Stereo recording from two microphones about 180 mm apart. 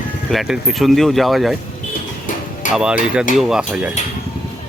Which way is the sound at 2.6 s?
45° left (ahead or behind).